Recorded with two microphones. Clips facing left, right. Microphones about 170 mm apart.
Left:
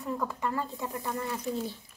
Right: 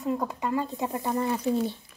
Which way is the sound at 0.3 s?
20° right (ahead or behind).